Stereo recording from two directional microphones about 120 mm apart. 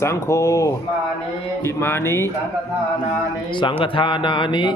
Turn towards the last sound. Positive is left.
turn(degrees=40)  # may be behind; listen again after turning